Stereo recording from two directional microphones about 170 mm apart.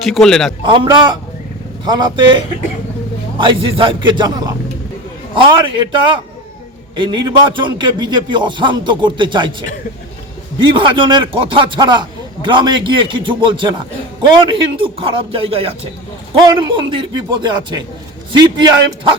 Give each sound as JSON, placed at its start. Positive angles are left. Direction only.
{"t": 0.0, "sound": "a man's voice", "side_deg": 0}
{"t": 0.9, "sound": "a man's voice", "side_deg": -25}
{"t": 5.5, "sound": "a man's voice", "side_deg": -25}